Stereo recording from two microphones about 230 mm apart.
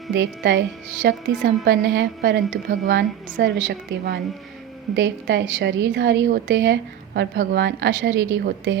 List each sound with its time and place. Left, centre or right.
0.1 s a woman's voice: right